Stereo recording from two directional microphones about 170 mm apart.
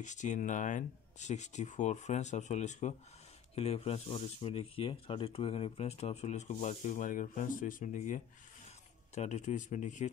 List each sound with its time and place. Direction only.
0.0 s speech: 45° left (ahead or behind)